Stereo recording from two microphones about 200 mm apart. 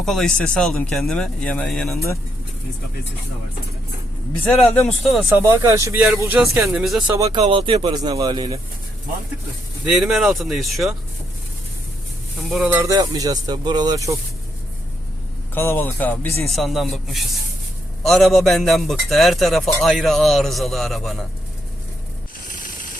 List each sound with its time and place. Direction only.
0.0 s a man's voice: centre (ahead or behind)
4.5 s a man's voice: centre (ahead or behind)
5.4 s speech: 15° right (ahead or behind)
6.7 s a man's voice: centre (ahead or behind)
7.3 s speech: 30° right (ahead or behind)
9.8 s a man's voice: centre (ahead or behind)
12.5 s speech: 5° right (ahead or behind)
15.5 s a man's voice: 10° left (ahead or behind)
22.4 s spray: 40° left (ahead or behind)